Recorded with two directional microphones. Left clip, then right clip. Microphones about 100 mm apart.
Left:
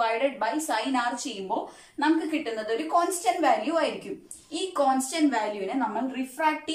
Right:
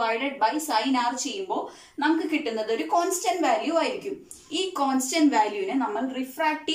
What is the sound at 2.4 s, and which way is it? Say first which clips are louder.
A woman's voice: right 2 dB; 15° right (ahead or behind).